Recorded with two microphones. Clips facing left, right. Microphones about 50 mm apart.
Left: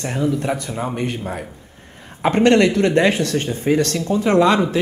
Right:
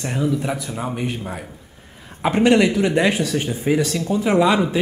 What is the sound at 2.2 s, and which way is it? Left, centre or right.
Speech, centre.